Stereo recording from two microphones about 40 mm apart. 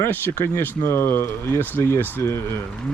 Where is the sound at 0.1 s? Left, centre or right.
Left.